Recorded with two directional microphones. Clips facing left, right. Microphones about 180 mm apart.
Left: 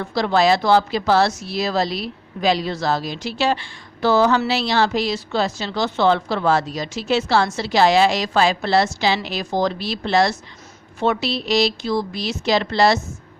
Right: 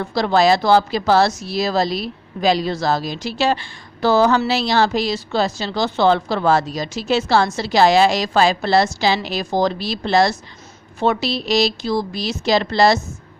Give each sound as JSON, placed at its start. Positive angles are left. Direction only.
{"t": 0.0, "sound": "speech", "side_deg": -40}